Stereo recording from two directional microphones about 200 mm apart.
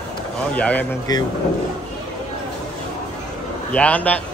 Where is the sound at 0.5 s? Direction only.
5° left (ahead or behind).